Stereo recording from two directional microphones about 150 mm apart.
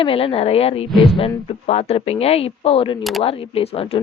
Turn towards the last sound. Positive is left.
turn(degrees=40)  # may be behind; listen again after turning